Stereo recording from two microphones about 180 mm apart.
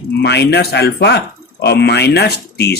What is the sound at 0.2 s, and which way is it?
Speech, 70° left (ahead or behind).